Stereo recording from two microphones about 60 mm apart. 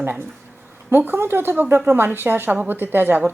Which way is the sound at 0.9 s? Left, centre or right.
Right.